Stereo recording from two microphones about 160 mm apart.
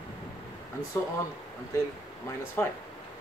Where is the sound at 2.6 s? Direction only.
15° left (ahead or behind).